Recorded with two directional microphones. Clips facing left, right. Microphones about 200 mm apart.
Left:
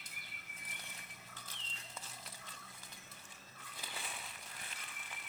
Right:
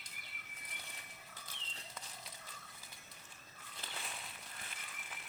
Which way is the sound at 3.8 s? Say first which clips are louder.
Even; 5° left (ahead or behind).